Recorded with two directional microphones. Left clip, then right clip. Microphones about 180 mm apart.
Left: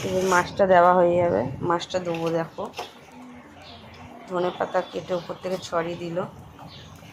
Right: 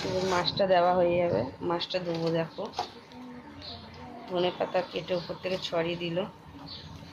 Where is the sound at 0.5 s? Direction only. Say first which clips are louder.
Left 7 dB; 25° left (ahead or behind).